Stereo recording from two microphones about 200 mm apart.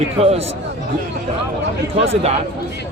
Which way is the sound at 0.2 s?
30° right (ahead or behind).